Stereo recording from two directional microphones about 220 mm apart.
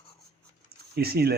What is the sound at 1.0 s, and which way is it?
Speech, 45° right (ahead or behind).